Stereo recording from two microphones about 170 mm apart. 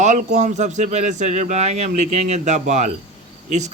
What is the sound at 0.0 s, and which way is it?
A man's voice, 45° right (ahead or behind).